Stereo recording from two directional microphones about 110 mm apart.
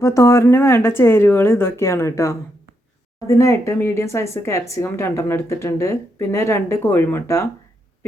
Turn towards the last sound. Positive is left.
turn(degrees=25)  # may be behind; listen again after turning